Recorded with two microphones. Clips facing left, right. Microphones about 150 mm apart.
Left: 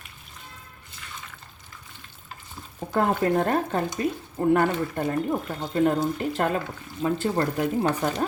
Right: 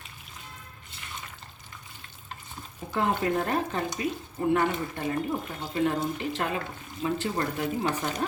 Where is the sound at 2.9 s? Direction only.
45° left (ahead or behind).